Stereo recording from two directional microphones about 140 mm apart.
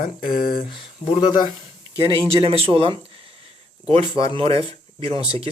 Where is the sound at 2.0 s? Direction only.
35° right (ahead or behind).